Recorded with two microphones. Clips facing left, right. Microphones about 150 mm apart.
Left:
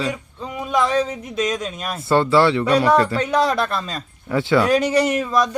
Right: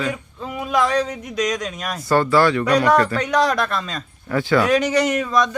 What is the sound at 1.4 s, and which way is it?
Speech, centre (ahead or behind).